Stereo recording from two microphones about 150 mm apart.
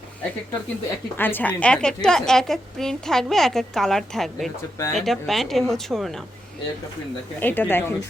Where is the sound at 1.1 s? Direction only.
15° left (ahead or behind).